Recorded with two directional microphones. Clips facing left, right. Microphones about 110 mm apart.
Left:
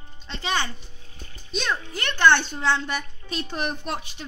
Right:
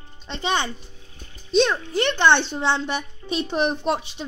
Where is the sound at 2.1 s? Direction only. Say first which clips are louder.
Left 1 dB; 25° right (ahead or behind).